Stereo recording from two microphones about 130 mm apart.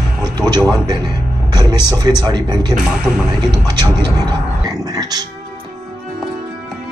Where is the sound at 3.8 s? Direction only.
35° right (ahead or behind).